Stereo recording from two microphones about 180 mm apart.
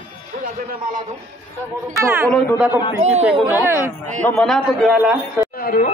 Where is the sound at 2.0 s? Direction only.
10° right (ahead or behind).